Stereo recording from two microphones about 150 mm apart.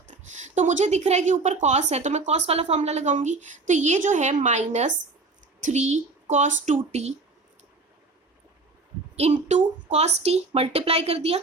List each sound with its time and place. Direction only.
0.1 s a woman's voice: 55° right (ahead or behind)
9.1 s a woman's voice: 50° right (ahead or behind)